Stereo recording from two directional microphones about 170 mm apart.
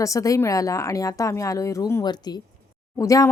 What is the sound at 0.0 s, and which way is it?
Speech, 20° left (ahead or behind).